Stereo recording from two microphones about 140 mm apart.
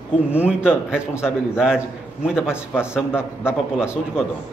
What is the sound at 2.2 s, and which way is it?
Speech, 5° right (ahead or behind).